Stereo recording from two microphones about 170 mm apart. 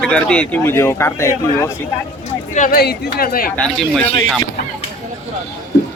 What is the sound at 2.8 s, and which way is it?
Speech, 65° left (ahead or behind).